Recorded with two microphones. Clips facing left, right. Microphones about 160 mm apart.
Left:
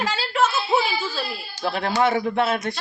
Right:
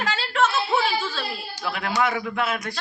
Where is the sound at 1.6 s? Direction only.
30° left (ahead or behind).